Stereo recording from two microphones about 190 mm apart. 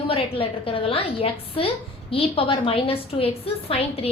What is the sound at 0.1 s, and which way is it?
A woman's voice, 30° left (ahead or behind).